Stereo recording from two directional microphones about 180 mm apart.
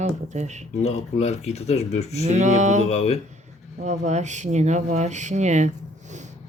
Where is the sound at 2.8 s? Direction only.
35° left (ahead or behind).